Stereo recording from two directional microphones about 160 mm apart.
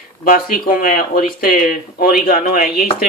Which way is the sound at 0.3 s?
60° left (ahead or behind).